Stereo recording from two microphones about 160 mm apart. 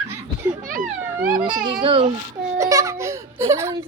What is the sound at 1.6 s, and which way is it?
Speech, 35° right (ahead or behind).